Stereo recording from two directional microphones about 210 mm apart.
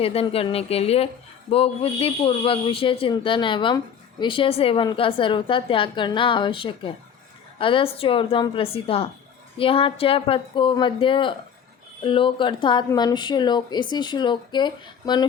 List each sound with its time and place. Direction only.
0.0 s a woman's voice: 30° left (ahead or behind)